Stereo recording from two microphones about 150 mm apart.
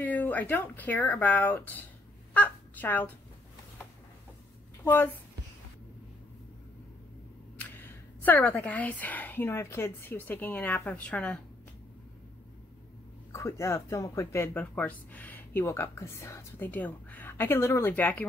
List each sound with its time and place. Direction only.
0.0 s speech: 10° left (ahead or behind)
4.8 s a woman's voice: 15° left (ahead or behind)
7.5 s a woman's voice: 10° left (ahead or behind)
13.3 s speech: 20° left (ahead or behind)